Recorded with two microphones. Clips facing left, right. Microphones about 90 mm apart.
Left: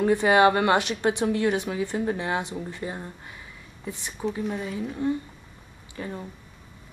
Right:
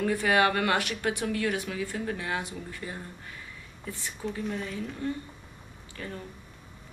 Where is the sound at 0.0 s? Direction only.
25° left (ahead or behind).